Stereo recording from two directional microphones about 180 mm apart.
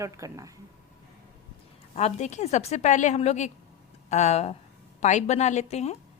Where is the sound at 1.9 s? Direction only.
40° left (ahead or behind).